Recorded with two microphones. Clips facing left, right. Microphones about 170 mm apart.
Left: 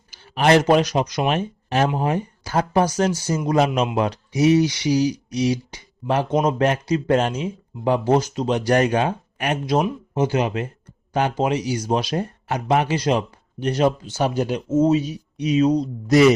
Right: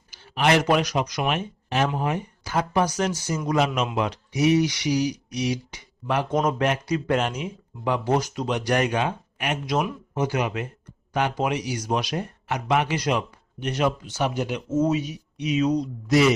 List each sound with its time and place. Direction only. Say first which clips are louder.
0.1 s a sound: left 5 dB; 35° left (ahead or behind)
0.6 s speech: left 4 dB; 25° left (ahead or behind)
6.3 s speech: left 3 dB; 20° left (ahead or behind)